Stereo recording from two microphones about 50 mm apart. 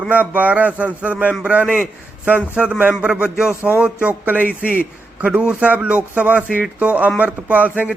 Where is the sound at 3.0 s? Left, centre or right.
Centre.